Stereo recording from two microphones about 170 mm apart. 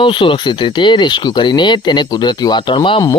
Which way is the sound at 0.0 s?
30° left (ahead or behind).